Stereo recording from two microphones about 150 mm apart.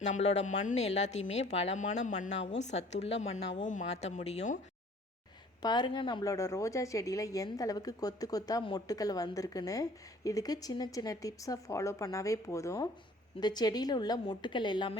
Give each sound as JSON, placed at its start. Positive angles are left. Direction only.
{"t": 0.0, "sound": "a woman's voice", "side_deg": 50}
{"t": 5.6, "sound": "a woman's voice", "side_deg": 30}